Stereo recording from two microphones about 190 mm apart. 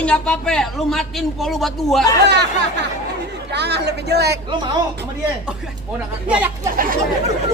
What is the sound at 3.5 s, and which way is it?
Speech, 60° right (ahead or behind).